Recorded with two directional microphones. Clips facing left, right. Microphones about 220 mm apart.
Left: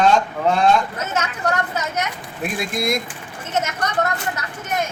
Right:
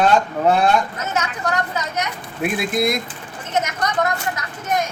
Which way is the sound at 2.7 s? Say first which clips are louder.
Right 2 dB; centre (ahead or behind).